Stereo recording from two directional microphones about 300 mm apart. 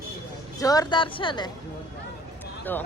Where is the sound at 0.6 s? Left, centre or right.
Centre.